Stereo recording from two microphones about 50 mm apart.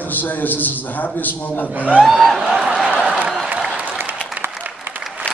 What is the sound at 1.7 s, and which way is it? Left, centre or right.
Speech, right.